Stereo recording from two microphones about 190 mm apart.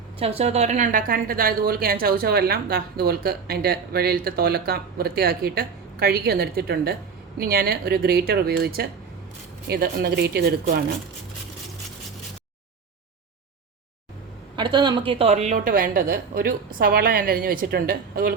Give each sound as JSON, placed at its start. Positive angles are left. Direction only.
{"t": 0.2, "sound": "a woman's voice", "side_deg": -35}
{"t": 14.5, "sound": "a woman's voice", "side_deg": -25}